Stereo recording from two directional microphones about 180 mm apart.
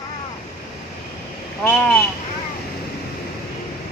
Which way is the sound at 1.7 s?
5° left (ahead or behind).